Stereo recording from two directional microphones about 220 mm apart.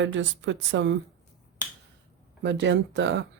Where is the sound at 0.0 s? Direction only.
55° right (ahead or behind).